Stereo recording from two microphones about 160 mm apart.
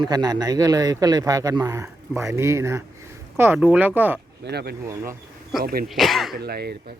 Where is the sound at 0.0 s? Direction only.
25° right (ahead or behind).